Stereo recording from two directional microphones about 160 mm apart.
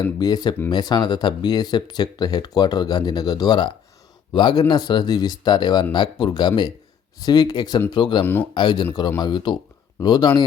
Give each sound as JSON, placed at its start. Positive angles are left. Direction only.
{"t": 0.0, "sound": "speech", "side_deg": 25}
{"t": 8.2, "sound": "speech", "side_deg": 15}
{"t": 8.5, "sound": "speech", "side_deg": 30}